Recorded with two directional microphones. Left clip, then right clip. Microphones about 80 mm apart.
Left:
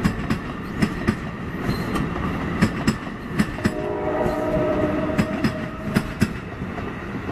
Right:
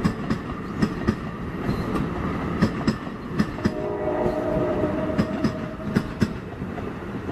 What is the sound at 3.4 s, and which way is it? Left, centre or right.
Vehicle, left.